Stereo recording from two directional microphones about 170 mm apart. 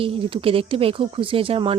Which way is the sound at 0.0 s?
35° right (ahead or behind).